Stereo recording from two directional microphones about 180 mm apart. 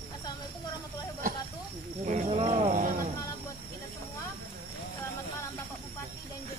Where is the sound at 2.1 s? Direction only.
35° right (ahead or behind).